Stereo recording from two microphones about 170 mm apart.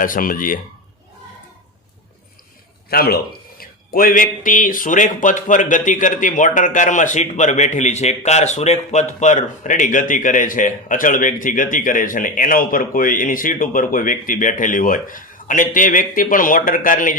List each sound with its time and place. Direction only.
0.0 s speech: 55° left (ahead or behind)
2.9 s speech: 65° left (ahead or behind)